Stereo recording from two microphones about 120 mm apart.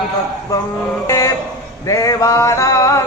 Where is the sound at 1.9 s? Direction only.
30° left (ahead or behind).